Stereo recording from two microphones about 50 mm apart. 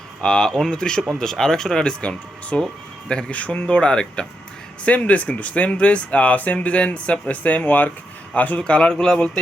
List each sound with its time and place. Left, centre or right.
0.2 s speech: centre